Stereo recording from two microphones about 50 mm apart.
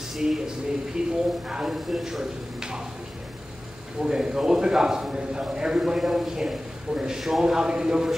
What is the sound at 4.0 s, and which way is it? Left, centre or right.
A man's voice, centre.